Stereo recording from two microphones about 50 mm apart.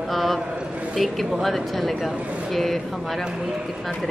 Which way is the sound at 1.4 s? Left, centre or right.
Centre.